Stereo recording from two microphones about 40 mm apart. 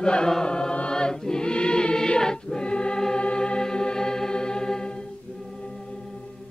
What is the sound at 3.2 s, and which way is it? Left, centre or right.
Music, left.